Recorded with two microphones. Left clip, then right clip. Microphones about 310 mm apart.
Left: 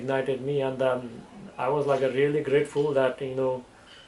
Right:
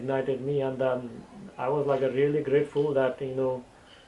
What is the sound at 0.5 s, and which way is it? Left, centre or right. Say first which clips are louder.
Speech: left 2 dB; right.